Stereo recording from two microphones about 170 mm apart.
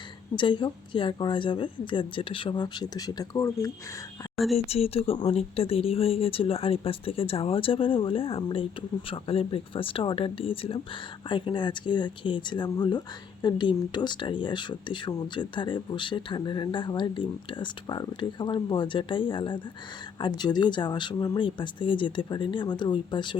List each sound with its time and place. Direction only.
0.3 s speech: 30° left (ahead or behind)
4.7 s speech: 35° left (ahead or behind)